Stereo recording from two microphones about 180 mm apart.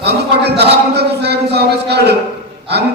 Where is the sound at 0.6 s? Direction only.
65° right (ahead or behind).